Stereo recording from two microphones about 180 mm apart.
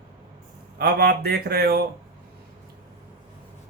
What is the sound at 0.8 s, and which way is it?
Speech, 60° right (ahead or behind).